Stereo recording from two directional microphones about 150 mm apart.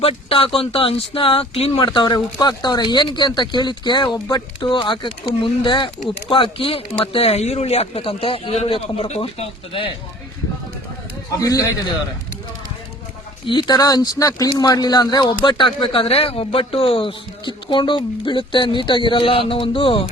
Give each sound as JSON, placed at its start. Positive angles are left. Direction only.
{"t": 0.0, "sound": "speech", "side_deg": 40}
{"t": 11.3, "sound": "a man's voice", "side_deg": 25}
{"t": 13.4, "sound": "speech", "side_deg": 30}